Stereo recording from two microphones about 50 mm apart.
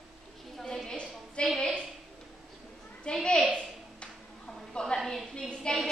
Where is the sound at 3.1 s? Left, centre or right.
Left.